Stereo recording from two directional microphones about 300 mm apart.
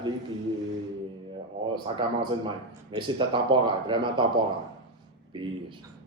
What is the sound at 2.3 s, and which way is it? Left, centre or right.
Speech, centre.